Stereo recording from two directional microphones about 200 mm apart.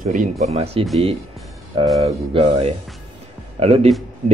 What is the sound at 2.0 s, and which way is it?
Speech, 30° right (ahead or behind).